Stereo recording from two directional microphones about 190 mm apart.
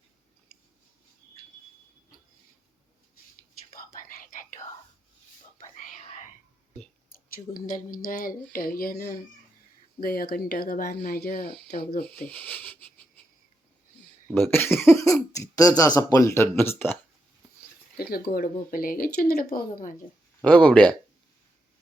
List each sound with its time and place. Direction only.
3.8 s whispering: 45° left (ahead or behind)
7.3 s speech: 45° left (ahead or behind)
12.2 s a sound: 10° left (ahead or behind)
14.3 s speech: 10° left (ahead or behind)
17.9 s speech: 55° left (ahead or behind)
20.4 s speech: 5° left (ahead or behind)